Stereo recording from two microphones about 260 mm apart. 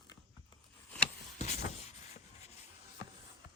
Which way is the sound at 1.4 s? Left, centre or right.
Left.